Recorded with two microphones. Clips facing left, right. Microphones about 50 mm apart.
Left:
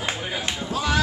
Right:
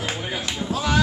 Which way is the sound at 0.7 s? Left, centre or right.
Centre.